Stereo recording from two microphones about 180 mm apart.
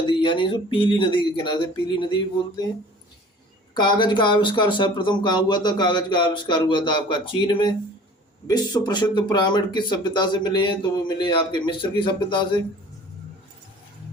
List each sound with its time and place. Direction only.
0.1 s speech: 30° left (ahead or behind)
3.8 s speech: 25° left (ahead or behind)